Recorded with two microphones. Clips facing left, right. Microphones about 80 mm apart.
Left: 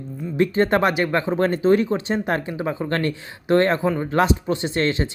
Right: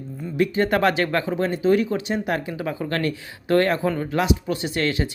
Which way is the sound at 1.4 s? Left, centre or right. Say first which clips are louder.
Left 2 dB; left.